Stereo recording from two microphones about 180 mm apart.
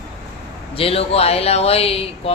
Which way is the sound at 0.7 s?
30° left (ahead or behind).